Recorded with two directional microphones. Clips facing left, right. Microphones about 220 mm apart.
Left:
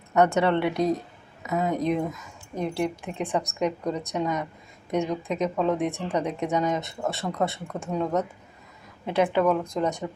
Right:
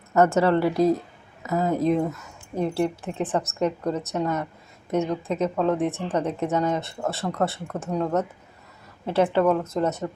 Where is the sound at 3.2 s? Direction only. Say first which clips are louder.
Right 2 dB; 5° right (ahead or behind).